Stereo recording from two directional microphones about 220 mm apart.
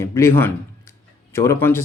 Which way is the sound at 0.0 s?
10° left (ahead or behind).